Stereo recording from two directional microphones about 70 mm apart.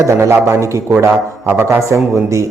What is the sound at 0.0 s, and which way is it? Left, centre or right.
A man's voice, right.